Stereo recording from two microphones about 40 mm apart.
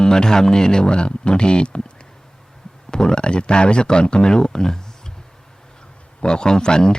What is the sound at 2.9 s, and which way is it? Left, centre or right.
Speech, centre.